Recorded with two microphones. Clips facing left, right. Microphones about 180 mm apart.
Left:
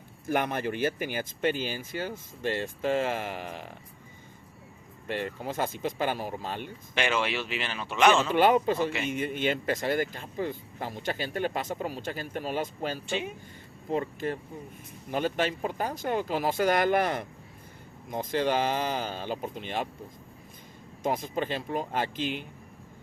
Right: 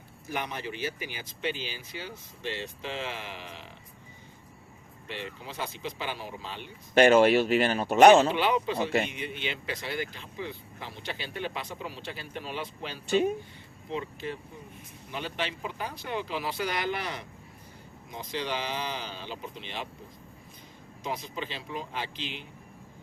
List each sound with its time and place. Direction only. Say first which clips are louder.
0.3 s speech: left 7 dB; 50° left (ahead or behind)
5.0 s speech: left 7 dB; 50° left (ahead or behind)
6.9 s speech: right 10 dB; 45° right (ahead or behind)
8.3 s speech: left 5 dB; 45° left (ahead or behind)
13.1 s speech: right 13 dB; 40° right (ahead or behind)
13.9 s speech: left 5 dB; 50° left (ahead or behind)
21.0 s speech: left 6 dB; 50° left (ahead or behind)